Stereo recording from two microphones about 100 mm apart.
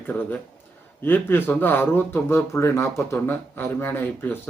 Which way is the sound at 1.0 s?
20° left (ahead or behind).